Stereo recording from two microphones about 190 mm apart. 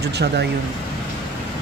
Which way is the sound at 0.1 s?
60° right (ahead or behind).